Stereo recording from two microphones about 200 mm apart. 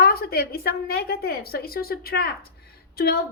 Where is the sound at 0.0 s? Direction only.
50° left (ahead or behind).